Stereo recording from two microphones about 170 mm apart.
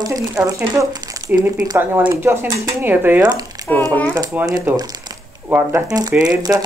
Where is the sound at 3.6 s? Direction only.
25° right (ahead or behind).